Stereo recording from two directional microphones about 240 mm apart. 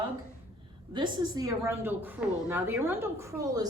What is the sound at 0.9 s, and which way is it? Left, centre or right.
A woman's voice, centre.